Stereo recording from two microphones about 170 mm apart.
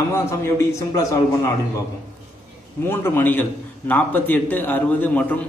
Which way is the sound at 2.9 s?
10° left (ahead or behind).